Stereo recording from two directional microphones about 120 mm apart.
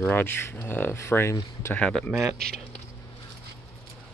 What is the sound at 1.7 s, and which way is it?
Speech, 5° left (ahead or behind).